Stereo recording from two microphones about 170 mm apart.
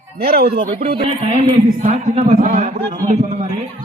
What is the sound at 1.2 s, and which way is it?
A man's voice, 40° right (ahead or behind).